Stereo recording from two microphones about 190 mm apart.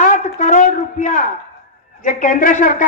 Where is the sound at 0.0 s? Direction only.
40° left (ahead or behind).